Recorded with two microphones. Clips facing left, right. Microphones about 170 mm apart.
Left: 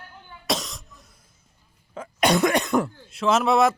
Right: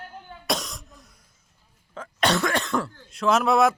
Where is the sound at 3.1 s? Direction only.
5° left (ahead or behind).